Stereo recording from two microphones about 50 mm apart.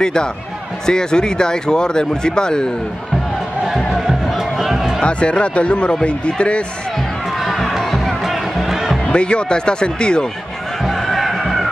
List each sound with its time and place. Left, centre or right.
0.0 s speech: centre
3.6 s music: centre
5.0 s speech: left
7.4 s music: centre
9.1 s speech: left
10.8 s music: centre